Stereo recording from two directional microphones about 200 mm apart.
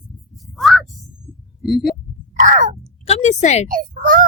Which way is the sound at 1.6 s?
Centre (ahead or behind).